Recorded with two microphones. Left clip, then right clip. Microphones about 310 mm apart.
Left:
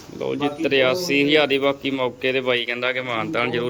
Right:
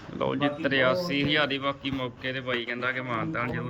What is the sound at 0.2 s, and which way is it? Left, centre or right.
Speech, centre.